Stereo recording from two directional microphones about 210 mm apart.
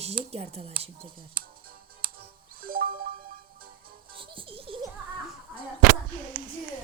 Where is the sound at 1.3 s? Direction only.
45° right (ahead or behind).